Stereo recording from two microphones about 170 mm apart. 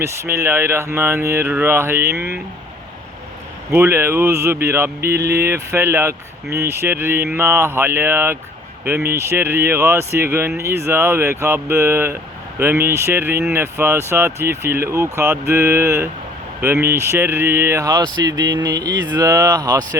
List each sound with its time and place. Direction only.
0.0 s speech: 15° right (ahead or behind)
3.7 s speech: 15° right (ahead or behind)